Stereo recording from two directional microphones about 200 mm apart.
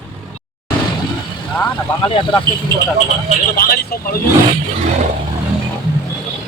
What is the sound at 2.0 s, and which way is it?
Speech, 20° left (ahead or behind).